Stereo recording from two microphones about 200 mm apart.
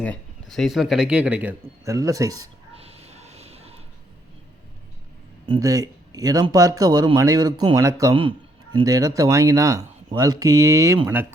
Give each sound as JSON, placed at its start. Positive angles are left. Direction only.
{"t": 0.5, "sound": "speech", "side_deg": 0}
{"t": 2.7, "sound": "a sound", "side_deg": -30}
{"t": 5.5, "sound": "speech", "side_deg": -15}